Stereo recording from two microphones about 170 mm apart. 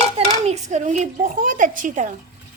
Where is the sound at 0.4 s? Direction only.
40° right (ahead or behind).